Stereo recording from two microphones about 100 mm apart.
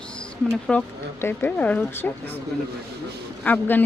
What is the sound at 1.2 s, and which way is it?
Speech, 20° left (ahead or behind).